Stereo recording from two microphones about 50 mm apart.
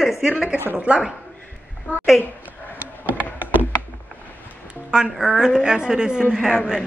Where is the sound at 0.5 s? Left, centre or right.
Left.